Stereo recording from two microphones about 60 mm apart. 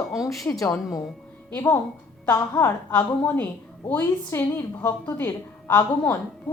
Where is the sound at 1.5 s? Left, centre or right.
Left.